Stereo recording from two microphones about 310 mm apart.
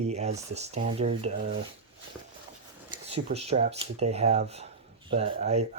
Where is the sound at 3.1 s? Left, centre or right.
Centre.